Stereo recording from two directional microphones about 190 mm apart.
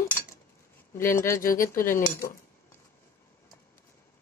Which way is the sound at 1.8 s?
15° left (ahead or behind).